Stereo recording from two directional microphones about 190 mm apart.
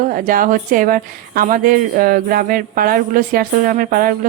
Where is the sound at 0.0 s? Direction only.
45° right (ahead or behind).